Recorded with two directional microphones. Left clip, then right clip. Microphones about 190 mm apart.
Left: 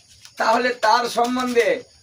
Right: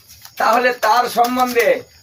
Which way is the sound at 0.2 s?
10° left (ahead or behind).